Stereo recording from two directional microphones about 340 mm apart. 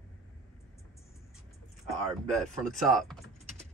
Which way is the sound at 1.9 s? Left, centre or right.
Centre.